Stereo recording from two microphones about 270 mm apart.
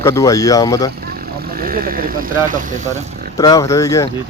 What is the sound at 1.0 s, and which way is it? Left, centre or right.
Speech, right.